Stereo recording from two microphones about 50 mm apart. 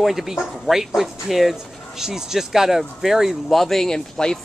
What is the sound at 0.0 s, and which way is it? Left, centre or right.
Speech, centre.